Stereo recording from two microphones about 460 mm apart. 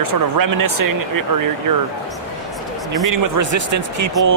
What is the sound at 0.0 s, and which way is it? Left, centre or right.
Speech, right.